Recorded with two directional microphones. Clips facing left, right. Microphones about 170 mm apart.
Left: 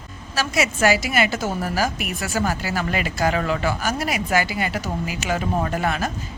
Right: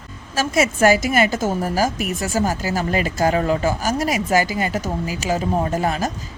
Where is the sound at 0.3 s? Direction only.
45° right (ahead or behind).